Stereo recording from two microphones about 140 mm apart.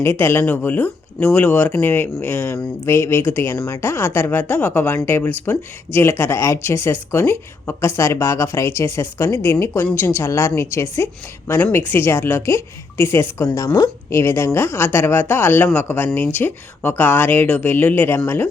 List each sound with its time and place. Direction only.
0.0 s speech: 15° left (ahead or behind)